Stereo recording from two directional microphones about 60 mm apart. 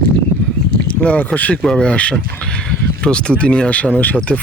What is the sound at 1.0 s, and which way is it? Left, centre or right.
Speech, left.